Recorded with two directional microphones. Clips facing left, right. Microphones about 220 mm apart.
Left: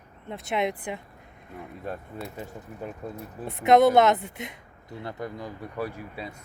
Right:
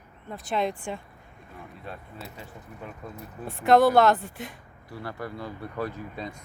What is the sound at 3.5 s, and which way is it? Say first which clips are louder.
Speech: left 1 dB; 20° left (ahead or behind).